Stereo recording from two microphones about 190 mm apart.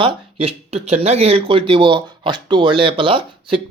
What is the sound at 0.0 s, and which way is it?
Speech, 30° right (ahead or behind).